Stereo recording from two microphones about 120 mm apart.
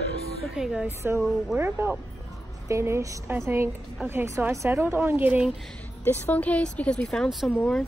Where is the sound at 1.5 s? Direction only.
15° right (ahead or behind).